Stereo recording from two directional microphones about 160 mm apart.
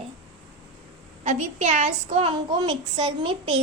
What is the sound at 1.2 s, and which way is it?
A woman's voice, 50° right (ahead or behind).